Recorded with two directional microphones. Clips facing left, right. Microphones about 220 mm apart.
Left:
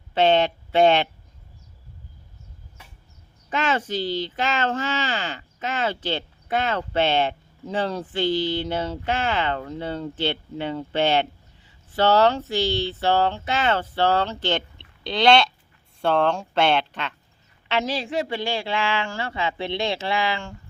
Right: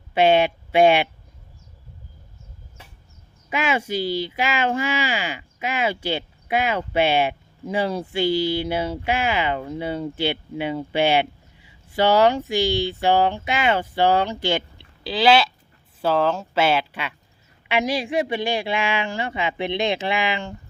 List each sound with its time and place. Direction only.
0.1 s speech: 10° right (ahead or behind)
3.5 s speech: 10° right (ahead or behind)